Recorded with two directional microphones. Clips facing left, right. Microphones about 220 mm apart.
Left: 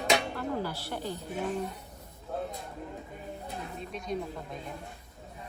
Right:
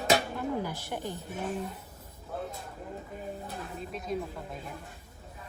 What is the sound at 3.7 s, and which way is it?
Speech, centre (ahead or behind).